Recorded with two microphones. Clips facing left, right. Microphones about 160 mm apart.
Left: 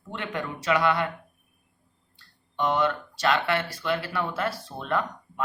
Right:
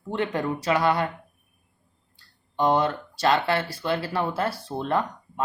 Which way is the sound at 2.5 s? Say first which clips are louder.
Right 3 dB; 35° right (ahead or behind).